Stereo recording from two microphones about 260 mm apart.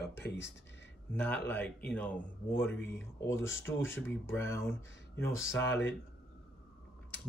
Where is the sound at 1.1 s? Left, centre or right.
Centre.